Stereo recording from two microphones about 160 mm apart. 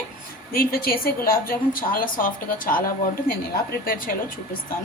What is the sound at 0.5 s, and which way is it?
A woman's voice, 70° left (ahead or behind).